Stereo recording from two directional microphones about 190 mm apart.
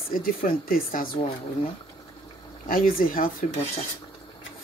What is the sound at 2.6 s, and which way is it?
Speech, 45° left (ahead or behind).